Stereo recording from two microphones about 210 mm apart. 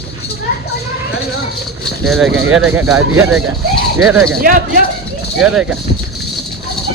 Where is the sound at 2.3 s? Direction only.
70° right (ahead or behind).